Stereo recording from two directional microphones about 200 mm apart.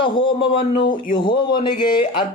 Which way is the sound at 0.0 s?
25° left (ahead or behind).